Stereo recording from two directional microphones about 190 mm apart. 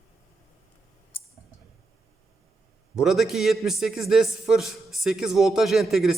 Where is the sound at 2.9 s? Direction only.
Centre (ahead or behind).